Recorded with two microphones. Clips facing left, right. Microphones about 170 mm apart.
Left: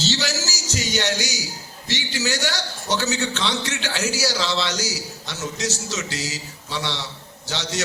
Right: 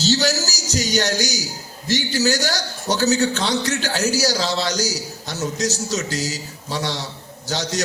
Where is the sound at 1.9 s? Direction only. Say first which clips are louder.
Right 6 dB; 40° right (ahead or behind).